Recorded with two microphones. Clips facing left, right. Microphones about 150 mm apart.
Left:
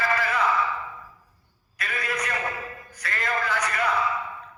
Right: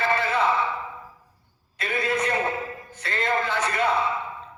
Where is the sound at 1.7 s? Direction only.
25° right (ahead or behind).